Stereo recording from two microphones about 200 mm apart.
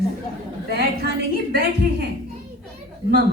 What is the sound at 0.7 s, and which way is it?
A woman's voice, 50° right (ahead or behind).